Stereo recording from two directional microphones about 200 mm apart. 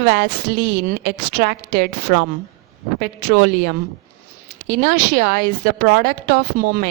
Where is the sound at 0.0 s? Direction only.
50° right (ahead or behind).